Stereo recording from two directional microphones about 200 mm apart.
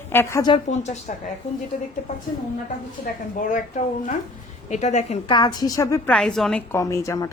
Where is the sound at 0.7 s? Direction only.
35° left (ahead or behind).